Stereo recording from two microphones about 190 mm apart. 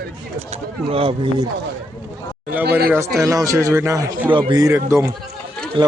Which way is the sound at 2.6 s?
55° right (ahead or behind).